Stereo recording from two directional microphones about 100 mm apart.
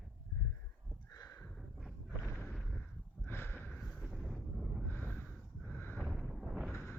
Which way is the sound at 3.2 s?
25° left (ahead or behind).